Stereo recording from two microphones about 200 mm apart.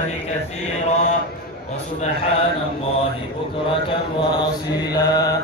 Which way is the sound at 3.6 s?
25° left (ahead or behind).